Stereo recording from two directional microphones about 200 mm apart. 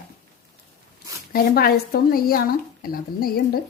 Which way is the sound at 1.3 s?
50° left (ahead or behind).